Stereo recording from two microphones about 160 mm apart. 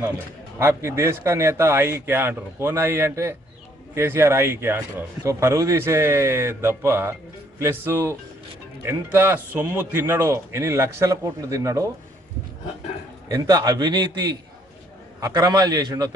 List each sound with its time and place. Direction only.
0.6 s speech: 15° right (ahead or behind)
13.3 s a man's voice: 20° right (ahead or behind)